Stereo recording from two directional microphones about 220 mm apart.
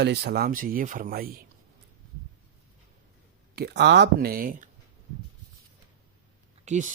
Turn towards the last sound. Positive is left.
turn(degrees=-35)  # may be behind; listen again after turning